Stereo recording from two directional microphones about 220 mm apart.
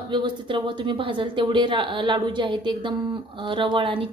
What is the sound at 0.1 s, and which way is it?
Speech, 20° right (ahead or behind).